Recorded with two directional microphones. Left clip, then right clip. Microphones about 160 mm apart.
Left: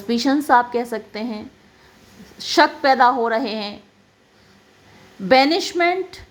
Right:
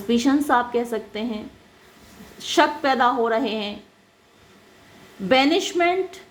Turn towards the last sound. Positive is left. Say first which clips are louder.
# left 1 dB
turn(degrees=20)  # may be behind; listen again after turning